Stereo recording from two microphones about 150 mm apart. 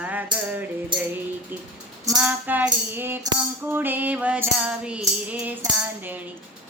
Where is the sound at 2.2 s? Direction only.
10° right (ahead or behind).